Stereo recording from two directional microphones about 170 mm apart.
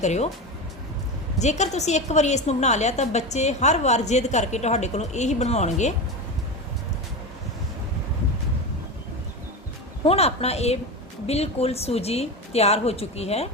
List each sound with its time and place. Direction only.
0.0 s a woman's voice: 40° left (ahead or behind)
1.4 s a woman's voice: 45° left (ahead or behind)
10.1 s a woman's voice: 40° left (ahead or behind)